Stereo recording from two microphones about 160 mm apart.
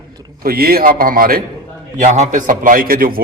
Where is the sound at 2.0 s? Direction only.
50° right (ahead or behind); by 3.2 s 65° right (ahead or behind).